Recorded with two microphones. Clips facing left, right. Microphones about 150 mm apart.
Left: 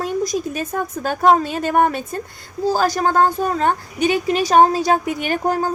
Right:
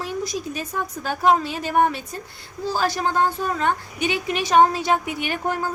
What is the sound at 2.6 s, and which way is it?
A woman's voice, 40° left (ahead or behind).